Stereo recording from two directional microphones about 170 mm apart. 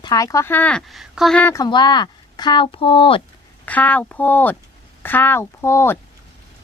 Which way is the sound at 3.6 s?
10° left (ahead or behind).